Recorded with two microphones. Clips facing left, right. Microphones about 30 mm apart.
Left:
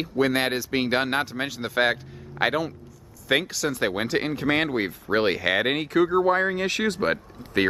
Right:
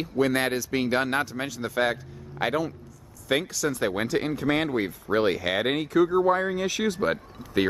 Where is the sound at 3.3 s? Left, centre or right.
Centre.